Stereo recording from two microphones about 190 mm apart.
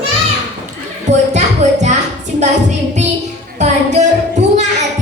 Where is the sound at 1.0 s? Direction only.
40° right (ahead or behind).